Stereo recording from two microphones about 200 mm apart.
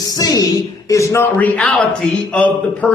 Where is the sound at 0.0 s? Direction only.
20° left (ahead or behind).